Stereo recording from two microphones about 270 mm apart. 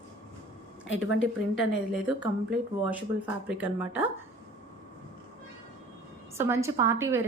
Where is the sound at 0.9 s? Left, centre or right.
Left.